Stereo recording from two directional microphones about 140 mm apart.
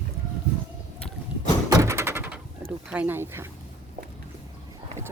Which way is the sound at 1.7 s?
20° right (ahead or behind).